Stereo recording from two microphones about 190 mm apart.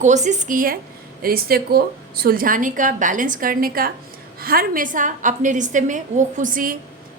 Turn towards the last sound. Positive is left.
turn(degrees=-45)  # may be behind; listen again after turning